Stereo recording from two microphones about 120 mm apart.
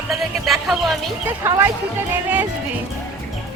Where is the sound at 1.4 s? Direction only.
20° right (ahead or behind).